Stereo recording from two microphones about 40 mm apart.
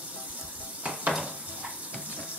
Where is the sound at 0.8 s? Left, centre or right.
Right.